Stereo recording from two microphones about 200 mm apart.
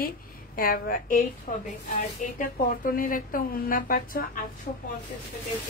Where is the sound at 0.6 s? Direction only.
45° left (ahead or behind).